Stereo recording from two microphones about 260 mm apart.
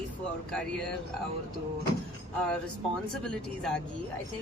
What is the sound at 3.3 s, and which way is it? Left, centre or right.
Speech, centre.